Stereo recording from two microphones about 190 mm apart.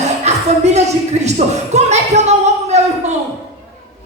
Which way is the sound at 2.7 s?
35° right (ahead or behind).